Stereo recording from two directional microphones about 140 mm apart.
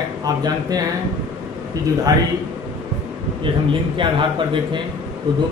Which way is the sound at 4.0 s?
35° right (ahead or behind).